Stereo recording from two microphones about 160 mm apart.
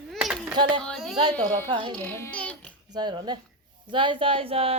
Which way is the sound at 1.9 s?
10° left (ahead or behind).